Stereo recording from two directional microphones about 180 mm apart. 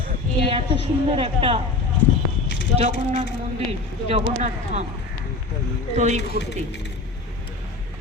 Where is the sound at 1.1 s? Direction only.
30° right (ahead or behind).